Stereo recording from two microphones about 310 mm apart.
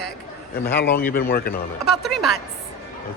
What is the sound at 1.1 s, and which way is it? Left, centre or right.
Speech, left.